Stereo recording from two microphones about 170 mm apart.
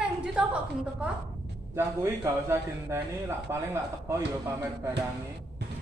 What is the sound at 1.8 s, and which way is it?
A man's voice, 15° right (ahead or behind).